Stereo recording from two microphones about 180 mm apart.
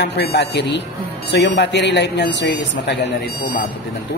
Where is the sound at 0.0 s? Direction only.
70° left (ahead or behind).